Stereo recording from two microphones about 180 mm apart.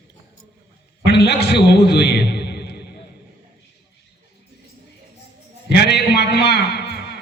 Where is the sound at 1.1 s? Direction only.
65° left (ahead or behind).